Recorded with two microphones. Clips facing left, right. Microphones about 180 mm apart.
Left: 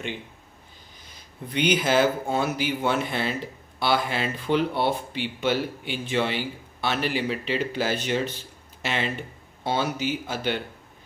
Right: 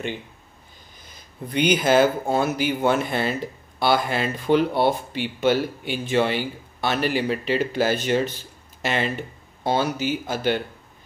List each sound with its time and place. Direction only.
1.5 s speech: 45° right (ahead or behind)